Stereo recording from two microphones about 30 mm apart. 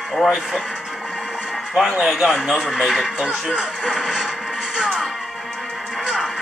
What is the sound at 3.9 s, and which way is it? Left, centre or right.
Music, centre.